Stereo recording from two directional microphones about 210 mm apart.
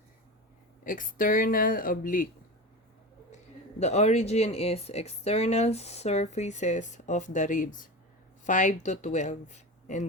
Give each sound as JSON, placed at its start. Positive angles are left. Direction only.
{"t": 0.9, "sound": "speech", "side_deg": 40}
{"t": 3.8, "sound": "speech", "side_deg": 30}